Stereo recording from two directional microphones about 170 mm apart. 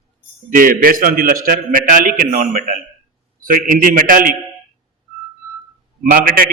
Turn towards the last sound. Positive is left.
turn(degrees=-55)  # may be behind; listen again after turning